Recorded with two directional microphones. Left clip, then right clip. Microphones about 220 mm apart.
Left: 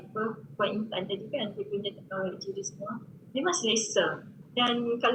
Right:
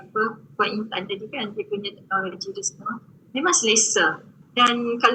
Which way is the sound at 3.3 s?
50° right (ahead or behind).